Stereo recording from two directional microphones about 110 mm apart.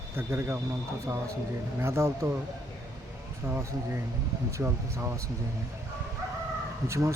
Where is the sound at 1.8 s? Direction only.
30° right (ahead or behind).